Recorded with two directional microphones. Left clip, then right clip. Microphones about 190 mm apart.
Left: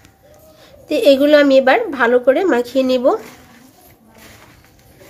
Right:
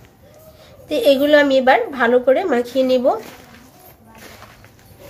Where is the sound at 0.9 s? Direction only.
35° left (ahead or behind).